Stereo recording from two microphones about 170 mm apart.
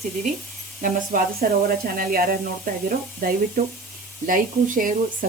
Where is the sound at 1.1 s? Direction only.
50° right (ahead or behind).